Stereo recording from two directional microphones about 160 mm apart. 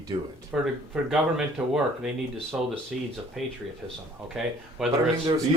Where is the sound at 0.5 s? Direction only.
5° right (ahead or behind).